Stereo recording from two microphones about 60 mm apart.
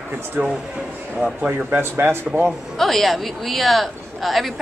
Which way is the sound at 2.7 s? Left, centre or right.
Centre.